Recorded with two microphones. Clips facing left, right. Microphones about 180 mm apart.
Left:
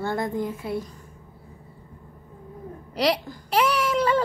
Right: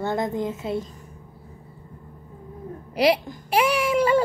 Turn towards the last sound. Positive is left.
turn(degrees=-10)  # may be behind; listen again after turning